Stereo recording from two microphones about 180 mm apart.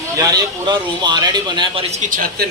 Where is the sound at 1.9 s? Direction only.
45° right (ahead or behind).